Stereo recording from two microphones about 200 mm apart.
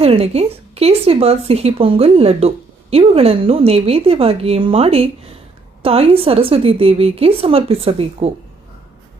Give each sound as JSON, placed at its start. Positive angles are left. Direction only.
{"t": 0.0, "sound": "speech", "side_deg": -30}